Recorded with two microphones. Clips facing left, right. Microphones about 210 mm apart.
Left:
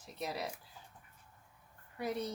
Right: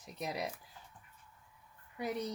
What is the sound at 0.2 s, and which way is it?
Speech, 15° right (ahead or behind).